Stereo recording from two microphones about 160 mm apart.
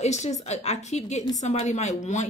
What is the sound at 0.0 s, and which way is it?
A woman's voice, 45° left (ahead or behind).